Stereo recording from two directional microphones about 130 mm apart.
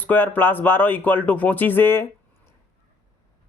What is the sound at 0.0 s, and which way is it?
Speech, 15° left (ahead or behind).